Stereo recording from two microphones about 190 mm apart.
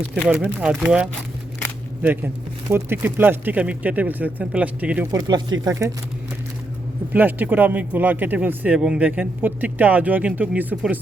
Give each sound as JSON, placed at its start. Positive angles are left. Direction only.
{"t": 0.6, "sound": "speech", "side_deg": -5}
{"t": 5.1, "sound": "speech", "side_deg": -20}
{"t": 7.1, "sound": "speech", "side_deg": -10}